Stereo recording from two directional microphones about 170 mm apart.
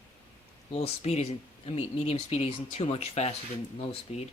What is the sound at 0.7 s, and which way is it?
Speech, 35° left (ahead or behind).